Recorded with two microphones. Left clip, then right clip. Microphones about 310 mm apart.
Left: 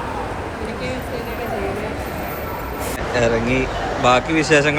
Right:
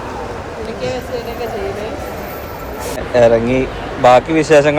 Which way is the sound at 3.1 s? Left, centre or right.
Centre.